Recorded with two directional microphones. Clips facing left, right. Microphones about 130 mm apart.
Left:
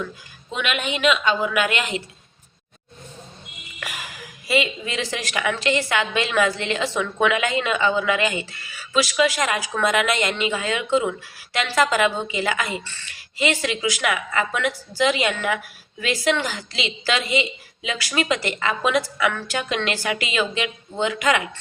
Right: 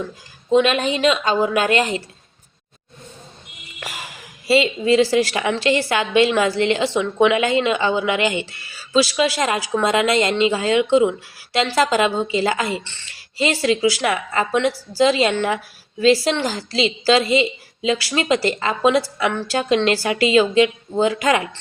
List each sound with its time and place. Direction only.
0.5 s a woman's voice: 35° right (ahead or behind)
4.4 s a woman's voice: 30° right (ahead or behind)